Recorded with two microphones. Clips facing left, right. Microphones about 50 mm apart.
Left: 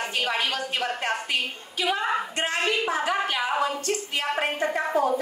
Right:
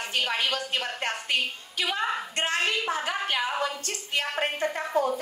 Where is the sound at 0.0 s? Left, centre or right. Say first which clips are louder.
Left 1 dB; left.